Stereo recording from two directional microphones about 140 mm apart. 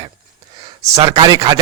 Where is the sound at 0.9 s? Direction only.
45° right (ahead or behind).